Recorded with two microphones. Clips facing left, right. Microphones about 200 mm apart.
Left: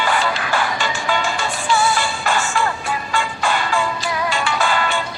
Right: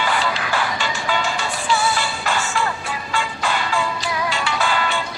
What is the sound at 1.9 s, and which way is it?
Music, 50° left (ahead or behind).